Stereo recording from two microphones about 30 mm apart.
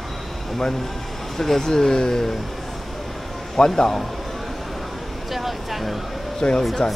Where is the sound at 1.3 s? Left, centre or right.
Centre.